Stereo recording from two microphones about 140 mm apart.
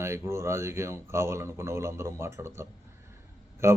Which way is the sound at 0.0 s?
20° right (ahead or behind).